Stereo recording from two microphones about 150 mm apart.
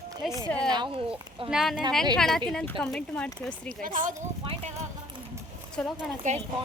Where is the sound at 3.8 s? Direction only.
60° right (ahead or behind).